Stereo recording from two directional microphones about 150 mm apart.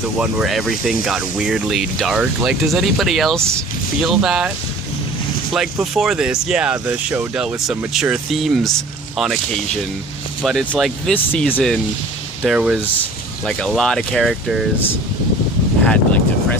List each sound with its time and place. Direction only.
0.2 s speech: 5° right (ahead or behind)
5.5 s speech: centre (ahead or behind)
10.4 s speech: centre (ahead or behind)
15.9 s vehicle: 10° left (ahead or behind)